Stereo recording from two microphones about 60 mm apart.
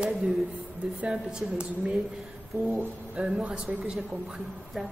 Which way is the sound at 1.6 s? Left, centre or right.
Centre.